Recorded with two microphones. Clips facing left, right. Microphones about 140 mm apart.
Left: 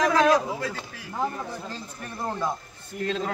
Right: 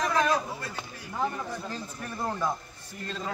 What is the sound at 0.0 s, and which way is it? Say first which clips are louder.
Speech: left 6 dB; 90° left.